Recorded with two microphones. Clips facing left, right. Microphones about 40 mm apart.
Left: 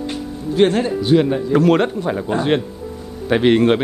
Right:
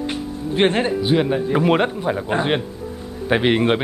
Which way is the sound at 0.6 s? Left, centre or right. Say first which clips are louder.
Left 3 dB; right.